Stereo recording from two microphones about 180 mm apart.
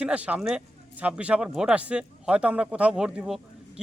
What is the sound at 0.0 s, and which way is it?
Speech, 5° right (ahead or behind).